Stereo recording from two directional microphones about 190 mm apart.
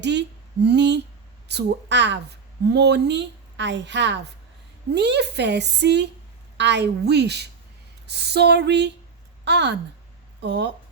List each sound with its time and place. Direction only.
0.0 s a woman's voice: 65° right (ahead or behind)